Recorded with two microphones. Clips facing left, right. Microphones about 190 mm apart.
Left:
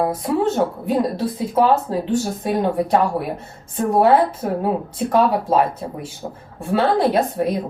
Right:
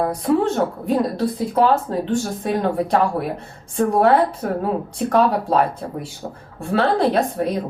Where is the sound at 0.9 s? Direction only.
Centre (ahead or behind).